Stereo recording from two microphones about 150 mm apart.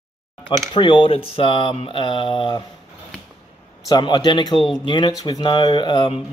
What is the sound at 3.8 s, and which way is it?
Speech, 30° left (ahead or behind).